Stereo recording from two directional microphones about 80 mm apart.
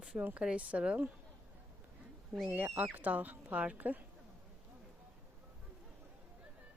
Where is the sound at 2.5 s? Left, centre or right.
Centre.